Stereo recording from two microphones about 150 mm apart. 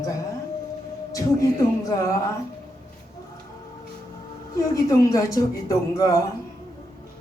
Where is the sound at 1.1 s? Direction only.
25° left (ahead or behind).